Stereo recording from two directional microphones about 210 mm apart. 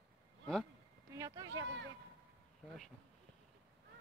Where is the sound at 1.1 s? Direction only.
15° right (ahead or behind).